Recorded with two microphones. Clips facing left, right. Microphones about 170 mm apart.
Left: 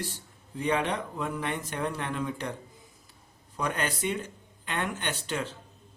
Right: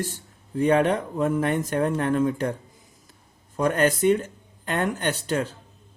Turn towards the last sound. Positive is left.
turn(degrees=-40)  # may be behind; listen again after turning